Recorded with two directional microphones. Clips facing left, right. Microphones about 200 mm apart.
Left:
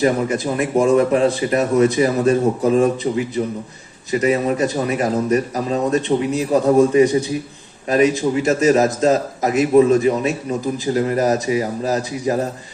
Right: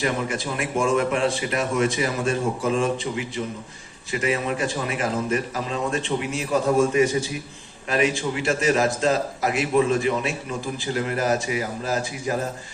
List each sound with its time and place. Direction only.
0.0 s a man's voice: 35° left (ahead or behind)